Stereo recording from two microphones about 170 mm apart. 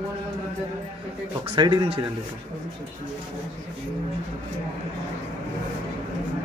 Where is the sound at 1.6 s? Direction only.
25° right (ahead or behind).